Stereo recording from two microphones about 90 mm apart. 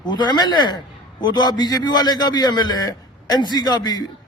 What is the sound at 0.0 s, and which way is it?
A man's voice, 55° left (ahead or behind).